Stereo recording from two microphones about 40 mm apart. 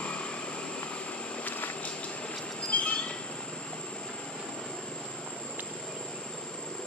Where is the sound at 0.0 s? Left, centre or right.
Left.